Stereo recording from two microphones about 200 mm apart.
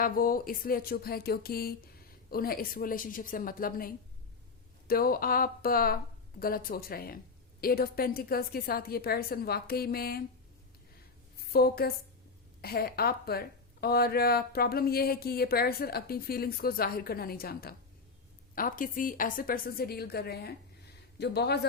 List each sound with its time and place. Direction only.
0.0 s speech: 45° left (ahead or behind)
11.3 s a woman's voice: 50° left (ahead or behind)